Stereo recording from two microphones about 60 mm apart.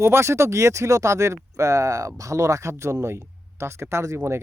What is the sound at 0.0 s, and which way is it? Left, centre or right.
Speech, right.